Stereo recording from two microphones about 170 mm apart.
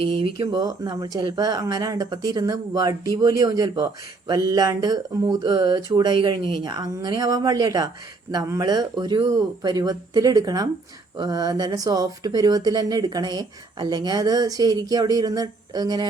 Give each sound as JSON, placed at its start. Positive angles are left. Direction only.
{"t": 0.0, "sound": "speech", "side_deg": -30}
{"t": 0.3, "sound": "speech", "side_deg": -20}